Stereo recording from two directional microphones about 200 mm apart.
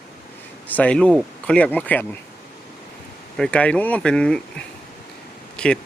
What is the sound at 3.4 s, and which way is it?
Speech, 5° left (ahead or behind).